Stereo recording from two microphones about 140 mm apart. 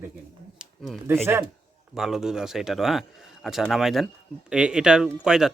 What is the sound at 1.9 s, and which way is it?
Speech, 5° right (ahead or behind).